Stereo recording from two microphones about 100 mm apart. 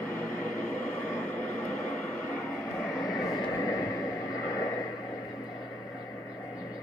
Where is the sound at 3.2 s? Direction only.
40° left (ahead or behind).